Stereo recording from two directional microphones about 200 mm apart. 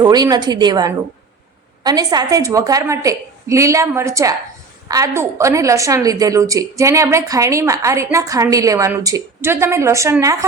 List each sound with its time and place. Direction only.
0.0 s a woman's voice: 20° right (ahead or behind)